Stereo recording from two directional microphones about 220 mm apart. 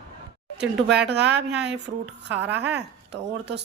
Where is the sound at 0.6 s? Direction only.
50° right (ahead or behind).